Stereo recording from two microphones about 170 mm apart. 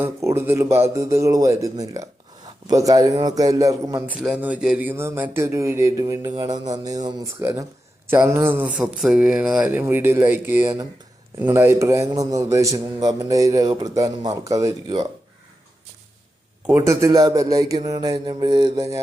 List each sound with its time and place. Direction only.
0.0 s speech: 15° right (ahead or behind)
4.0 s speech: 5° right (ahead or behind); by 15.0 s 20° right (ahead or behind)
16.6 s speech: 15° right (ahead or behind)